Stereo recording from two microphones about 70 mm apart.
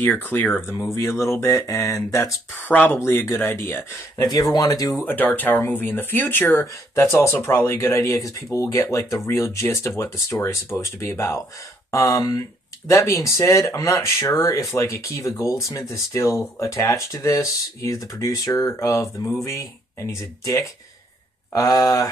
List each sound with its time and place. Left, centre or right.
0.0 s speech: left
0.7 s speech: left
2.6 s speech: left
3.0 s speech: left
4.2 s speech: left
4.9 s speech: left
7.1 s speech: left
7.9 s speech: left
18.7 s speech: left